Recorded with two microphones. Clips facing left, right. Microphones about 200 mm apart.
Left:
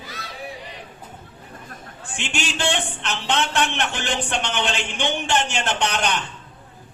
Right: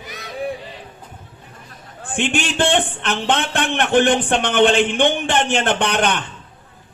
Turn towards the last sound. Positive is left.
turn(degrees=-55)  # may be behind; listen again after turning